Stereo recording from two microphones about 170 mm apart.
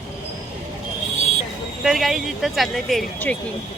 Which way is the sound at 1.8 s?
Centre (ahead or behind).